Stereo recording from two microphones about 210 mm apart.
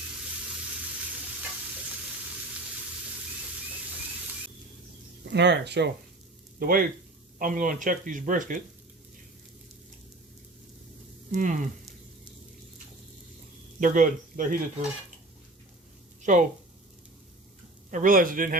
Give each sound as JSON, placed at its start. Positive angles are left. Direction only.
{"t": 5.3, "sound": "speech", "side_deg": -55}
{"t": 6.6, "sound": "speech", "side_deg": -45}
{"t": 11.3, "sound": "a sound", "side_deg": -35}
{"t": 13.7, "sound": "speech", "side_deg": -40}
{"t": 16.2, "sound": "speech", "side_deg": -35}
{"t": 17.9, "sound": "speech", "side_deg": -40}